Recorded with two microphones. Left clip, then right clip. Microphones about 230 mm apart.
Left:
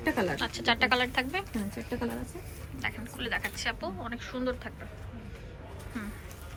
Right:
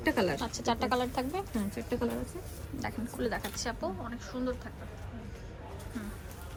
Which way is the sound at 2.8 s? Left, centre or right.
Right.